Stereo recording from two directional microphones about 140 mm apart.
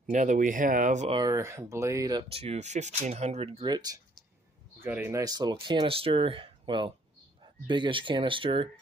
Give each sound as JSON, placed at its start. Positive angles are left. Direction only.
{"t": 0.0, "sound": "speech", "side_deg": -60}
{"t": 1.2, "sound": "speech", "side_deg": -20}
{"t": 2.3, "sound": "speech", "side_deg": -50}
{"t": 3.6, "sound": "speech", "side_deg": -30}
{"t": 4.7, "sound": "a man's voice", "side_deg": -15}
{"t": 5.2, "sound": "speech", "side_deg": -30}